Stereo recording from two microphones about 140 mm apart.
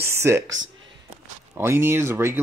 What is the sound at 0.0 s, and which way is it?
Speech, 20° right (ahead or behind).